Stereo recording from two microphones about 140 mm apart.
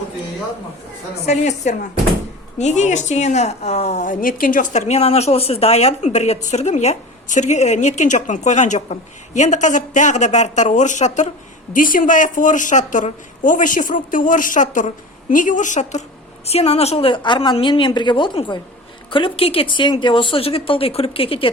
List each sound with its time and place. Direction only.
1.2 s a woman's voice: 50° left (ahead or behind)
11.7 s a woman's voice: 75° left (ahead or behind); by 16.0 s 60° left (ahead or behind)
16.5 s speech: 45° left (ahead or behind)